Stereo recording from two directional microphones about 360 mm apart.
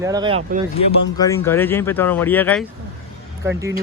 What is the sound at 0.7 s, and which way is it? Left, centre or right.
Speech, centre.